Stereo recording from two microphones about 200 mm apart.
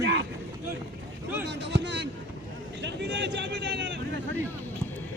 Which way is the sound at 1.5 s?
60° right (ahead or behind).